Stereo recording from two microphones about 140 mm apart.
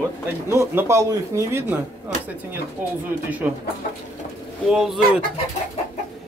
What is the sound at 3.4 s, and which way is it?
Speech, 10° right (ahead or behind).